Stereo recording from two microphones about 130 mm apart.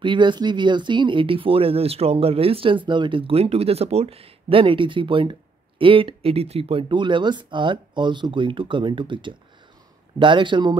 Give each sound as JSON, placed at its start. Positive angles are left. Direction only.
{"t": 0.0, "sound": "speech", "side_deg": -35}